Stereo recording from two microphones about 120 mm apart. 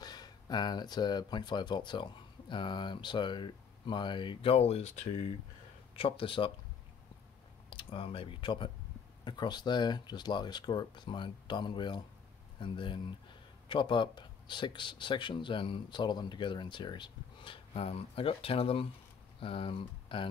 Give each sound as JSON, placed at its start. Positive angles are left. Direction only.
{"t": 0.0, "sound": "speech", "side_deg": 35}
{"t": 5.9, "sound": "speech", "side_deg": 50}
{"t": 7.7, "sound": "speech", "side_deg": 50}